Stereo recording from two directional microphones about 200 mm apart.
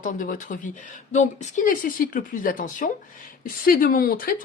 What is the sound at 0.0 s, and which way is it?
A woman's voice, 40° left (ahead or behind).